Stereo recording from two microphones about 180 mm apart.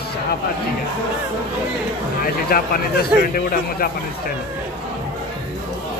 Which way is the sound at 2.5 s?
55° left (ahead or behind).